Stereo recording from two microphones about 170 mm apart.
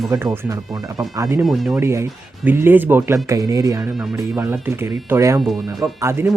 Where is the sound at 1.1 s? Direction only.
20° right (ahead or behind).